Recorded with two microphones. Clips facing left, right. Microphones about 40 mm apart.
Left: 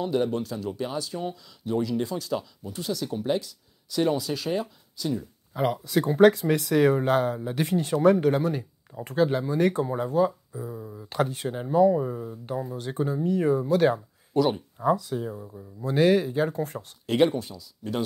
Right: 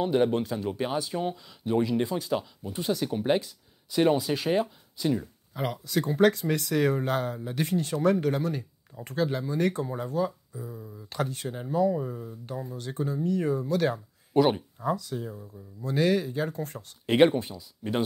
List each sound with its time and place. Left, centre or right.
0.0 s speech: right
5.5 s speech: centre
11.9 s speech: left
12.7 s speech: left
14.3 s speech: right
14.9 s speech: centre
17.0 s speech: right